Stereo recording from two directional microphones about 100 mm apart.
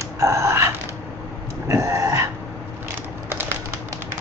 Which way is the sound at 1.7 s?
35° right (ahead or behind).